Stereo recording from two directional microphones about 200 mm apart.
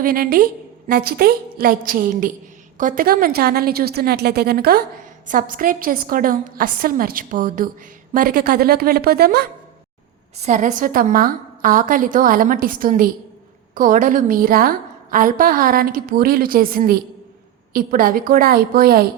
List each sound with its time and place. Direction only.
0.0 s a woman's voice: 45° right (ahead or behind)
10.3 s a woman's voice: 35° right (ahead or behind)